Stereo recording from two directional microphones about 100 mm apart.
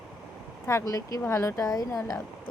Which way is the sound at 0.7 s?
30° left (ahead or behind).